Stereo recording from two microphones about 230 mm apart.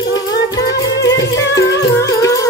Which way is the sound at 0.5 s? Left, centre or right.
Centre.